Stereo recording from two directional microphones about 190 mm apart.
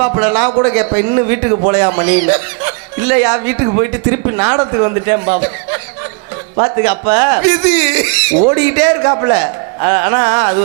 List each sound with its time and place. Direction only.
0.0 s speech: 20° right (ahead or behind)
3.7 s speech: 25° right (ahead or behind)